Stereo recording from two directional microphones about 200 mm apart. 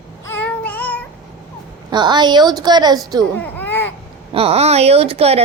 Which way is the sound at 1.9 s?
20° right (ahead or behind).